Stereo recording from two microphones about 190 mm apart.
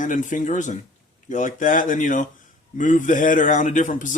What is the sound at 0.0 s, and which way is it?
A man's voice, 40° left (ahead or behind).